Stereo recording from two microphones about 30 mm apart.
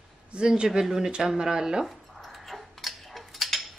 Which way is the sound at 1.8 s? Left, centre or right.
Centre.